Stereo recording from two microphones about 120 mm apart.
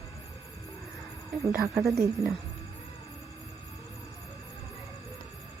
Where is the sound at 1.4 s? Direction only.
25° right (ahead or behind).